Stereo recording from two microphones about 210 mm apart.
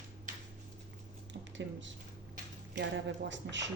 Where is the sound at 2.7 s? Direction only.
60° right (ahead or behind).